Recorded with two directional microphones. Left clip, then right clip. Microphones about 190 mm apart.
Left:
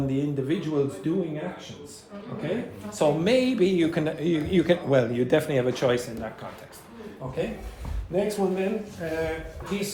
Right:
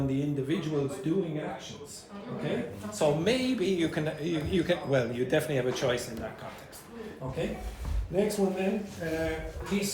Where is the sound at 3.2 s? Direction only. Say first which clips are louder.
Left 6 dB; 40° left (ahead or behind).